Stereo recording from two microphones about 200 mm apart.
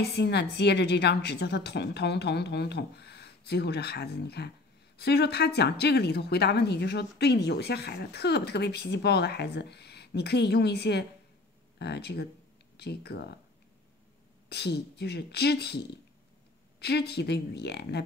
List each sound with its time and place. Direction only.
0.0 s speech: 55° left (ahead or behind)
14.5 s speech: 55° left (ahead or behind)
16.8 s speech: 55° left (ahead or behind)